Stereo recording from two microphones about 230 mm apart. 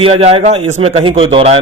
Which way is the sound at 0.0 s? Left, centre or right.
Right.